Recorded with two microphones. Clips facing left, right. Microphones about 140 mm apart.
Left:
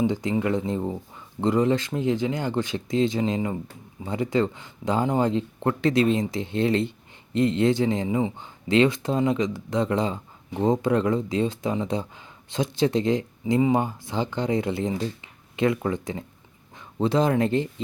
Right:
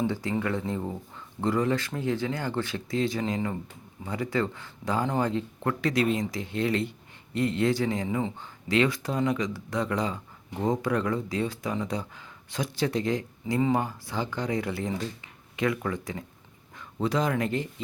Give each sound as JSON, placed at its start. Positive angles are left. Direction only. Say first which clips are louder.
{"t": 0.0, "sound": "speech", "louder": "left 4 dB", "side_deg": 20}